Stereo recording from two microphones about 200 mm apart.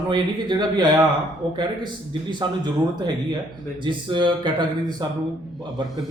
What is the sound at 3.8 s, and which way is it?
Speech, 25° right (ahead or behind).